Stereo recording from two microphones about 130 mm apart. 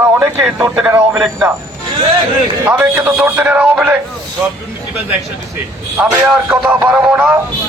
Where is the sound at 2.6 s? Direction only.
15° right (ahead or behind).